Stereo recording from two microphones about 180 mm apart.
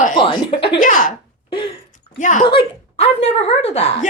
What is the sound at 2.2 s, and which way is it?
Speech, 45° left (ahead or behind).